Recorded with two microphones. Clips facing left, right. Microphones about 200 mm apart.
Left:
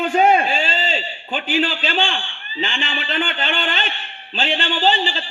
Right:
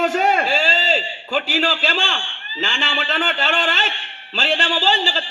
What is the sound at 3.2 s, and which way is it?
Speech, 80° right.